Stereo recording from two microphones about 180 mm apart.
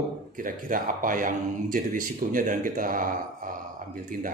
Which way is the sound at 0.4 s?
50° right (ahead or behind).